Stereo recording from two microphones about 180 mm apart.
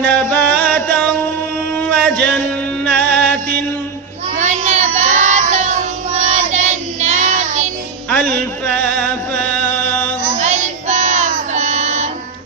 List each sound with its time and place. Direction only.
0.0 s music: 5° left (ahead or behind)
1.7 s a sound: 5° left (ahead or behind)
3.1 s music: 5° left (ahead or behind)
4.4 s child singing: 40° right (ahead or behind)
8.1 s chant: 10° left (ahead or behind)
10.2 s child singing: 45° right (ahead or behind)